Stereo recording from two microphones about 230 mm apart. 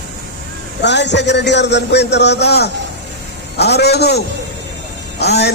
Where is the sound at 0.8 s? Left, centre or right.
Left.